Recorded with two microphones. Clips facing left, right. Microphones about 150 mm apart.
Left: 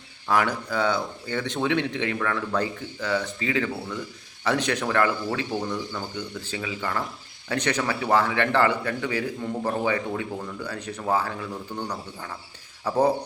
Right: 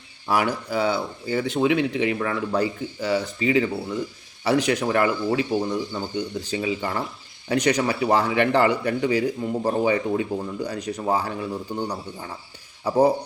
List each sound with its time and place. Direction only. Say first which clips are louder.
0.3 s a man's voice: right 1 dB; 10° right (ahead or behind)